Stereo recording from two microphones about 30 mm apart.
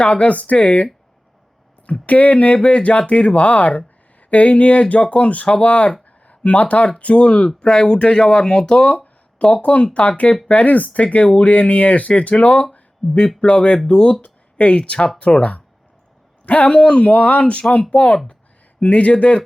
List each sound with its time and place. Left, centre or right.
0.0 s speech: left
1.9 s speech: left
7.6 s speech: left
8.8 s speech: left
10.5 s speech: left
18.8 s speech: left